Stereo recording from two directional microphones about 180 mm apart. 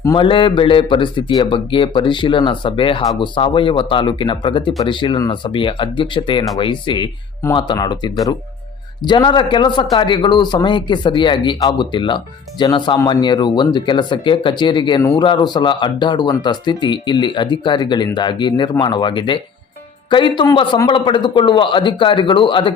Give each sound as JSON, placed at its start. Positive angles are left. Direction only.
{"t": 0.0, "sound": "speech", "side_deg": 25}